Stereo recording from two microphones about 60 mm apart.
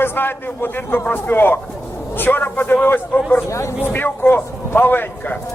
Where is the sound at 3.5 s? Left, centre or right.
Left.